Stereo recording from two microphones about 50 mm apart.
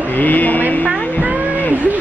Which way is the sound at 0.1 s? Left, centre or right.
Left.